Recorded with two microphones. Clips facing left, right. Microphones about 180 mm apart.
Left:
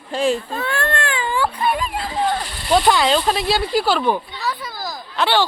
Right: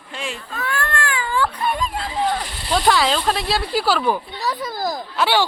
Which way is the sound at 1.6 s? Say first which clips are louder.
Left 2 dB; 5° left (ahead or behind).